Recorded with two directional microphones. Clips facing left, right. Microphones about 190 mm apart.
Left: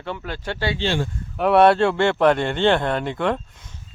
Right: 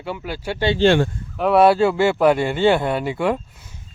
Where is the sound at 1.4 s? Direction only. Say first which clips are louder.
Right 1 dB; centre (ahead or behind).